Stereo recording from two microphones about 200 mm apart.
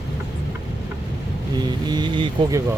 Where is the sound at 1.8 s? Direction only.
20° right (ahead or behind).